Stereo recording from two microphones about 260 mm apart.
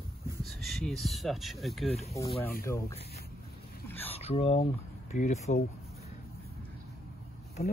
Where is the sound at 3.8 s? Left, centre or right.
Centre.